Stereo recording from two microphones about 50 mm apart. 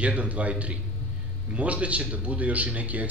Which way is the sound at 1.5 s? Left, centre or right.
Right.